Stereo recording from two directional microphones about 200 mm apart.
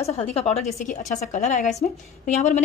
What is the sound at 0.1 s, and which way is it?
A woman's voice, 30° left (ahead or behind).